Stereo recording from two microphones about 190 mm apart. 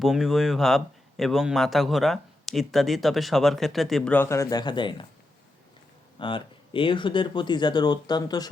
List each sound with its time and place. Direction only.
0.0 s speech: centre (ahead or behind); by 5.0 s 25° left (ahead or behind)
6.1 s speech: 25° left (ahead or behind)